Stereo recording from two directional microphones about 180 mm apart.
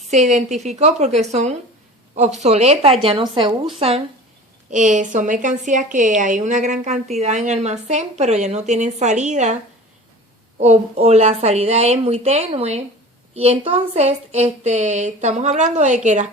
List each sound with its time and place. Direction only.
0.1 s a woman's voice: 40° right (ahead or behind)
4.7 s a woman's voice: 45° right (ahead or behind)
10.6 s a woman's voice: 35° right (ahead or behind)